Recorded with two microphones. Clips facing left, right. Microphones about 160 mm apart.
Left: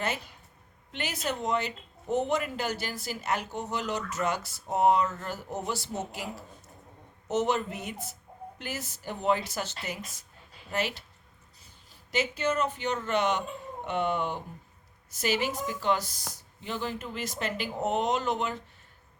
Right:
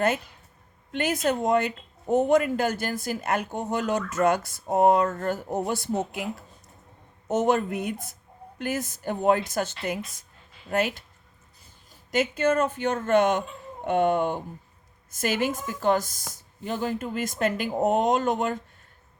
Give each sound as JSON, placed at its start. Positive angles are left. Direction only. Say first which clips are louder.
{"t": 0.9, "sound": "speech", "louder": "right 8 dB", "side_deg": -50}
{"t": 7.3, "sound": "speech", "louder": "right 5 dB", "side_deg": -50}
{"t": 12.1, "sound": "speech", "louder": "right 6 dB", "side_deg": -50}